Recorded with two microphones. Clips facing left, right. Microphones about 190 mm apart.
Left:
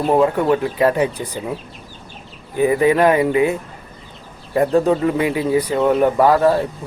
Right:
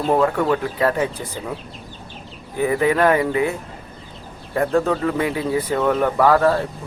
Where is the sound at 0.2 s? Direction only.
20° left (ahead or behind).